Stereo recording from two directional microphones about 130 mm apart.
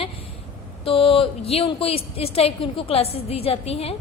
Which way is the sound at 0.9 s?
45° left (ahead or behind).